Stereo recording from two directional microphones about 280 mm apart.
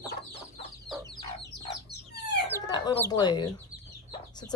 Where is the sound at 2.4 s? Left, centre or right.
Centre.